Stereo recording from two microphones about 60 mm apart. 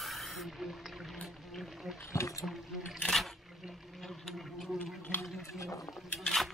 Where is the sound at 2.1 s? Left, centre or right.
Left.